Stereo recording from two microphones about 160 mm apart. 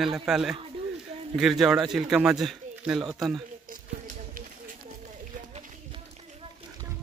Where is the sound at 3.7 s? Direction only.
55° right (ahead or behind).